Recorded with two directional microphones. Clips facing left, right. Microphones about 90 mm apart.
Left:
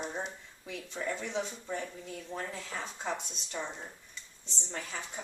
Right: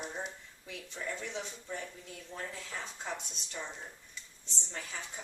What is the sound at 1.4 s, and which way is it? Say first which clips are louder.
Dishes: left 4 dB; 5° left (ahead or behind).